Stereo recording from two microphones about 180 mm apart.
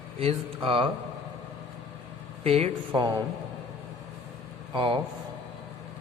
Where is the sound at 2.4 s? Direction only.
35° right (ahead or behind).